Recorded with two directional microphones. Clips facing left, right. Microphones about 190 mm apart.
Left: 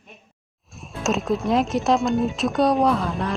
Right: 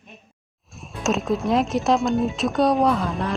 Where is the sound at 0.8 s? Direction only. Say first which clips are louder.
Even; centre (ahead or behind).